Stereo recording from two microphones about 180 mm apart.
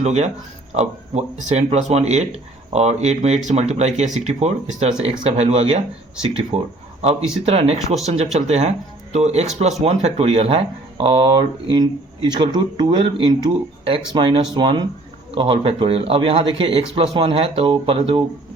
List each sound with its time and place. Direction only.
0.0 s speech: 40° right (ahead or behind)